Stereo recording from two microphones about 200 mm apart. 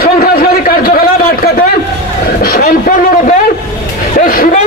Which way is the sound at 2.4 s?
50° left (ahead or behind).